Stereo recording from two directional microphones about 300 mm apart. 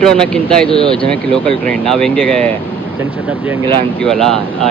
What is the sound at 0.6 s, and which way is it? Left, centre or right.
Speech, centre.